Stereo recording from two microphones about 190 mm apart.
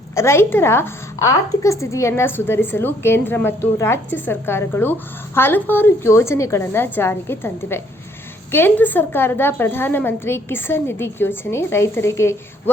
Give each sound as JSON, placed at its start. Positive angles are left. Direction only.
{"t": 0.1, "sound": "a woman's voice", "side_deg": 15}